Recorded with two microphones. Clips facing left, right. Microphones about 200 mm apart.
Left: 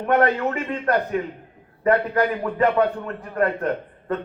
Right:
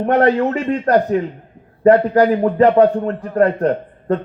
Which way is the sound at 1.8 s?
35° right (ahead or behind).